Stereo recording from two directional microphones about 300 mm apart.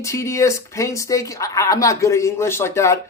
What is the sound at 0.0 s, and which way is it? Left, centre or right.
Speech, centre.